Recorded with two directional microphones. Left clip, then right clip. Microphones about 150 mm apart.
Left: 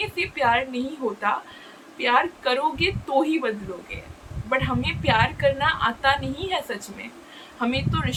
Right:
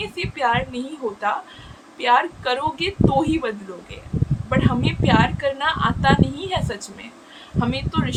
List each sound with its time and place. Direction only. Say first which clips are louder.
0.0 s a woman's voice: even; 15° right (ahead or behind)